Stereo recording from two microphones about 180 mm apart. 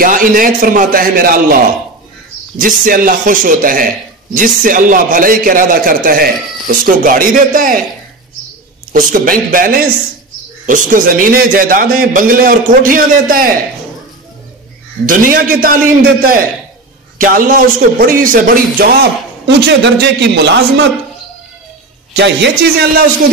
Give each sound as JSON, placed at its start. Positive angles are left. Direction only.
{"t": 0.0, "sound": "a man's voice", "side_deg": -50}
{"t": 2.6, "sound": "a man's voice", "side_deg": -50}
{"t": 8.9, "sound": "a man's voice", "side_deg": -50}
{"t": 15.0, "sound": "a man's voice", "side_deg": -50}
{"t": 19.4, "sound": "a man's voice", "side_deg": -70}
{"t": 22.1, "sound": "a man's voice", "side_deg": -70}